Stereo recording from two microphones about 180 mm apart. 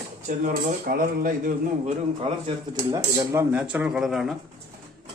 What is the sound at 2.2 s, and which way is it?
Speech, 30° right (ahead or behind).